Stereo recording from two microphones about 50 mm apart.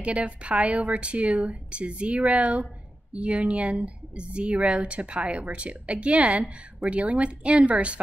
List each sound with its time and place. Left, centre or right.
0.0 s speech: right